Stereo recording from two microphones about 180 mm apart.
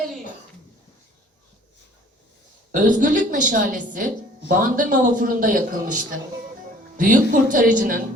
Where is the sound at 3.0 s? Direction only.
45° right (ahead or behind).